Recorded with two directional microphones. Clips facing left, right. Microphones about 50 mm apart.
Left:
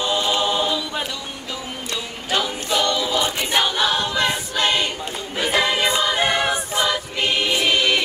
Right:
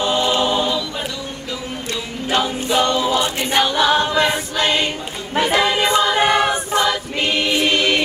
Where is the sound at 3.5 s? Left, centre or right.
Centre.